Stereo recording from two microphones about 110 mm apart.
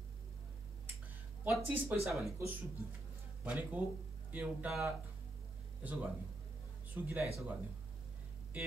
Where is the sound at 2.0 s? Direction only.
Centre (ahead or behind).